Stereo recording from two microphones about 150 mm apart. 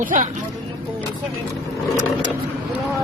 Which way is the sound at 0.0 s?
60° right (ahead or behind).